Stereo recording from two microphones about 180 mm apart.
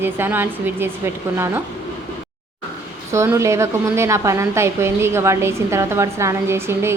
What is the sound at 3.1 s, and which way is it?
A woman's voice, 15° right (ahead or behind).